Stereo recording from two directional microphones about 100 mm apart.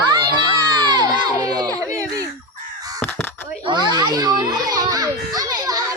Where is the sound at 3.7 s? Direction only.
45° right (ahead or behind).